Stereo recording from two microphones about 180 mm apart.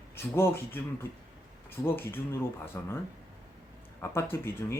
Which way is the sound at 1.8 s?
15° left (ahead or behind).